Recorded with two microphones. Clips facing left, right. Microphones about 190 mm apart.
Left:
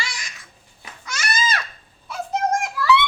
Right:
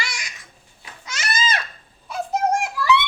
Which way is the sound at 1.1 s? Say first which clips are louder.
Even; 20° right (ahead or behind).